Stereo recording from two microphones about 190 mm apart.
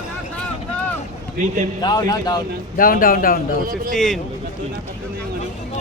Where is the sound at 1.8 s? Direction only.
20° left (ahead or behind).